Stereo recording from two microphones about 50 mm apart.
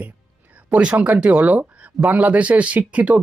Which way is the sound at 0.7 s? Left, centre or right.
Right.